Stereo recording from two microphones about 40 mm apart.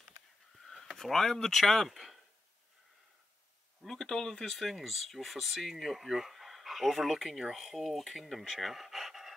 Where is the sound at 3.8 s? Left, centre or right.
Centre.